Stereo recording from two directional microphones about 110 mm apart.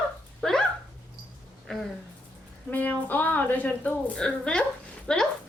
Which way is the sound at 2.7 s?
15° left (ahead or behind).